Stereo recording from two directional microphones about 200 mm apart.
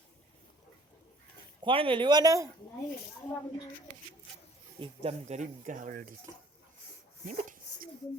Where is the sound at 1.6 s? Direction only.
25° right (ahead or behind).